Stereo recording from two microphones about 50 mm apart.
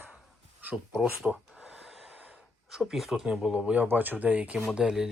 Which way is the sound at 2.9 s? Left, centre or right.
Centre.